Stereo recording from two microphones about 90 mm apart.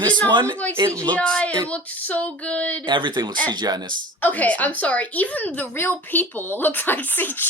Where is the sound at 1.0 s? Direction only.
15° left (ahead or behind).